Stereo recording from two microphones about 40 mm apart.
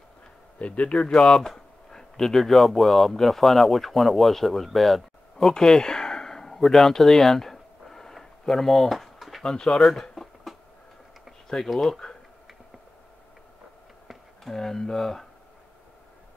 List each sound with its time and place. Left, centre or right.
0.6 s a man's voice: left; by 4.6 s centre
4.7 s a sound: centre
5.5 s a sound: centre
9.4 s speech: centre
11.4 s a man's voice: centre
14.0 s speech: centre